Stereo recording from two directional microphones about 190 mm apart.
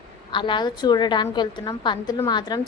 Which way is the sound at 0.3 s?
25° left (ahead or behind).